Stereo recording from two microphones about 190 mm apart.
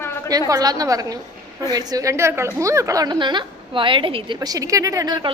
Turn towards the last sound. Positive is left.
turn(degrees=-20)  # may be behind; listen again after turning